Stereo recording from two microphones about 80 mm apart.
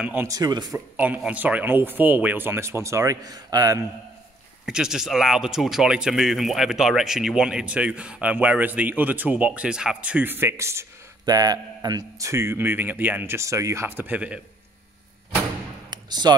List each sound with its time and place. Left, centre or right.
0.3 s speech: right
0.7 s speech: right
3.3 s a man's voice: right
4.6 s speech: centre
10.1 s speech: right
11.2 s a man's voice: right
12.3 s speech: right
13.4 s speech: right
13.8 s speech: right
15.9 s a sound: right